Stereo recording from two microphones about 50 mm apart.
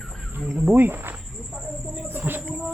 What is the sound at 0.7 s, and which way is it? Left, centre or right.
Speech, right.